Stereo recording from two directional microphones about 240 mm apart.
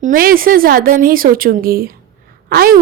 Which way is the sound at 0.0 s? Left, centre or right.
Right.